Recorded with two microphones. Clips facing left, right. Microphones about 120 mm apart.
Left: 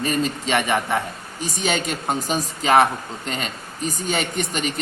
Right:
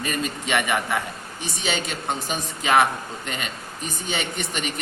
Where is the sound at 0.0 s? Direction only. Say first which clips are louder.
Left 5 dB; 30° left (ahead or behind).